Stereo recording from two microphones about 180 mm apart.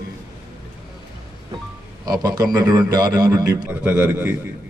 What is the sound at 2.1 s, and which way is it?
A man's voice, 20° right (ahead or behind).